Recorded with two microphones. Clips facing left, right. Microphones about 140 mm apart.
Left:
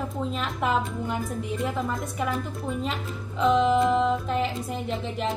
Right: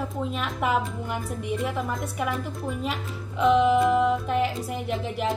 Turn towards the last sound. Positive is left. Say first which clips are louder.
# right 1 dB
turn(degrees=-5)  # may be behind; listen again after turning